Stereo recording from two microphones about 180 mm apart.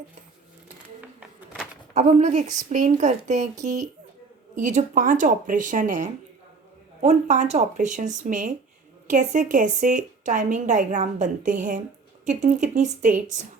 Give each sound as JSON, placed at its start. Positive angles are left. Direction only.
{"t": 1.9, "sound": "a woman's voice", "side_deg": -40}